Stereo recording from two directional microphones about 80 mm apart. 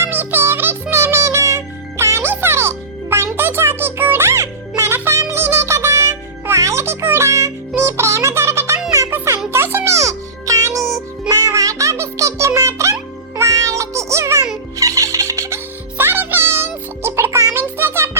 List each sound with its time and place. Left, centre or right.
0.0 s music: right